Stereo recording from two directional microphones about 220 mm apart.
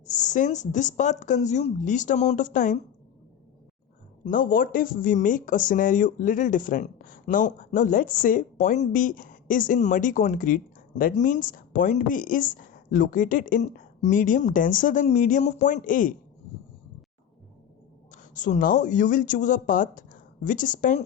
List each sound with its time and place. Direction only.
0.1 s speech: 35° left (ahead or behind)
4.3 s speech: 40° left (ahead or behind)
18.1 s speech: 35° left (ahead or behind)